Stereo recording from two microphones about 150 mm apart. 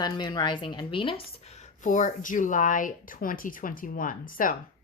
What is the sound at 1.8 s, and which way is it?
Speech, 55° left (ahead or behind).